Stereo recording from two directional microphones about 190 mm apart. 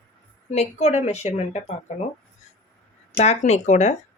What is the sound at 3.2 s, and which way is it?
Speech, 35° left (ahead or behind).